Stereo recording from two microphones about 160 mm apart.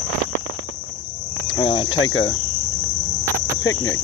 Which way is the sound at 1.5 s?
30° left (ahead or behind).